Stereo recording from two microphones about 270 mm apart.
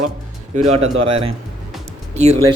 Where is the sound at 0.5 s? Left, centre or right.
Right.